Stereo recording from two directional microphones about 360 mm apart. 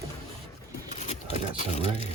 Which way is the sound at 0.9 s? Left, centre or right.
Centre.